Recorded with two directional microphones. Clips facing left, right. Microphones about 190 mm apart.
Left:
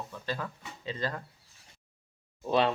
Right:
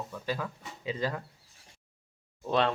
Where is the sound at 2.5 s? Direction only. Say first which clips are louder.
Left 1 dB; 5° left (ahead or behind).